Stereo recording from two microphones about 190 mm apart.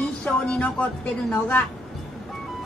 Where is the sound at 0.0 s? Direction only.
Centre (ahead or behind).